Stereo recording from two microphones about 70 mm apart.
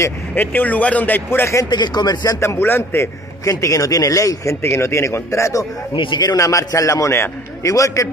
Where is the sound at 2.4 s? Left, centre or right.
Left.